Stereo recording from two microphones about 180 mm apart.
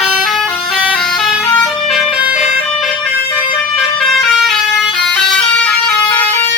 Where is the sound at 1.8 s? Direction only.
5° right (ahead or behind).